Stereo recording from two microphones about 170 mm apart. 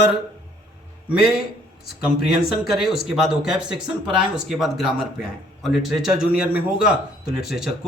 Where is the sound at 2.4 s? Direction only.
Centre (ahead or behind).